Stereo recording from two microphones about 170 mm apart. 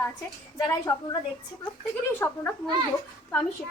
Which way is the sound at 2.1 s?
10° left (ahead or behind).